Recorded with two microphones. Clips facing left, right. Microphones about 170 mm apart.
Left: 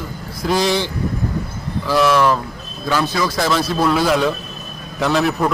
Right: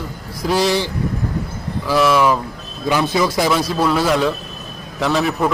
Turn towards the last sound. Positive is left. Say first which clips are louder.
# even
turn(degrees=0)  # may be behind; listen again after turning